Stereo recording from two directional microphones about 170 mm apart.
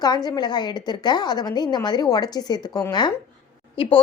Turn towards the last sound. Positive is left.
turn(degrees=30)  # may be behind; listen again after turning